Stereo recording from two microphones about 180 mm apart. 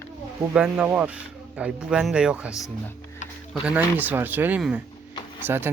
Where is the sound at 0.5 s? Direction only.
5° right (ahead or behind).